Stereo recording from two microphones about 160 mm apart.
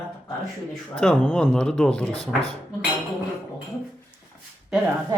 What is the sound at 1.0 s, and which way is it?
Speech, 10° left (ahead or behind).